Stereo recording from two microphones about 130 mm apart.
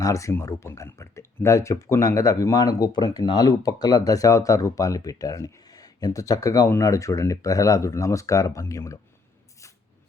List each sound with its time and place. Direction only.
0.0 s speech: 25° left (ahead or behind)